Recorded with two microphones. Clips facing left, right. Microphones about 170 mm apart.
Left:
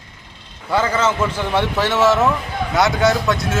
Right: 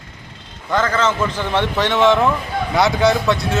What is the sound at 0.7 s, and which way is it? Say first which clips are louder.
A man's voice: even; 10° left (ahead or behind).